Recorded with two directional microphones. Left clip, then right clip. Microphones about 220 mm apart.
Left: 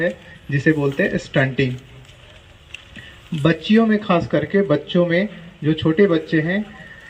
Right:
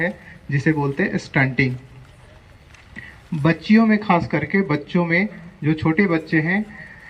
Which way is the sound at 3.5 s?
Centre (ahead or behind).